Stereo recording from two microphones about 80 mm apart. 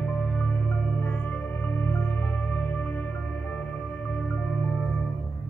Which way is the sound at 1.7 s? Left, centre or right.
Left.